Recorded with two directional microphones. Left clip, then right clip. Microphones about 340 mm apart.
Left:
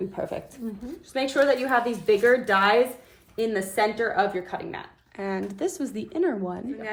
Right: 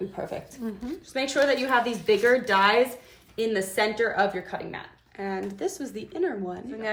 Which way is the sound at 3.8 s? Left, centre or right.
Centre.